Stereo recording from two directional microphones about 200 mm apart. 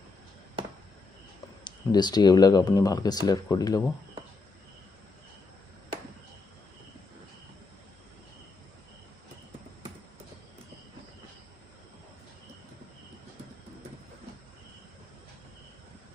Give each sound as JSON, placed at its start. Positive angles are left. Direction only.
{"t": 1.6, "sound": "speech", "side_deg": 20}